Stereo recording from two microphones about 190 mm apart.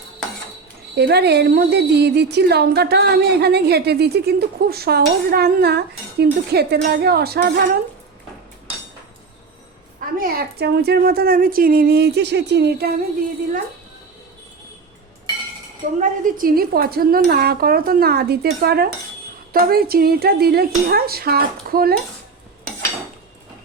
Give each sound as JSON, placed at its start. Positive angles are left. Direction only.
{"t": 0.9, "sound": "a woman's voice", "side_deg": -60}
{"t": 10.2, "sound": "a woman's voice", "side_deg": -55}
{"t": 16.0, "sound": "speech", "side_deg": -45}